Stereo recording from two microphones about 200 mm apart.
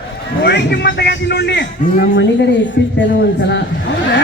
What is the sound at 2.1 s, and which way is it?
A man's voice, 65° left (ahead or behind).